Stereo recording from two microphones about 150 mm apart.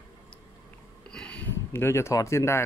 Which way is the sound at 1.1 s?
10° left (ahead or behind).